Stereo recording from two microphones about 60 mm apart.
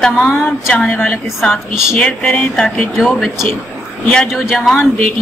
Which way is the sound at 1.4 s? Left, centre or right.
Centre.